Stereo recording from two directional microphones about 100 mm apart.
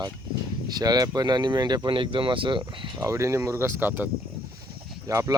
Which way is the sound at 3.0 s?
30° right (ahead or behind).